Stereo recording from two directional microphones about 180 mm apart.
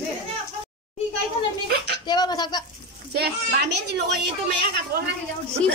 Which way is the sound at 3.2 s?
65° right (ahead or behind).